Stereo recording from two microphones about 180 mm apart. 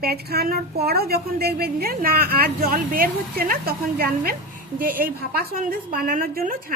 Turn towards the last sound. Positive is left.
turn(degrees=-50)  # may be behind; listen again after turning